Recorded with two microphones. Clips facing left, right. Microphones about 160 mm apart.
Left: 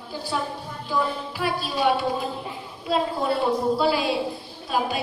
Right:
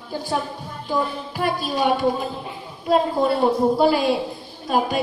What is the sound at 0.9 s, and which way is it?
A woman's voice, 45° right (ahead or behind).